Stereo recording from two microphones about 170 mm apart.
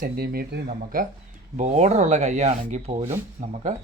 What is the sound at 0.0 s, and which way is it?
Speech, 65° right (ahead or behind).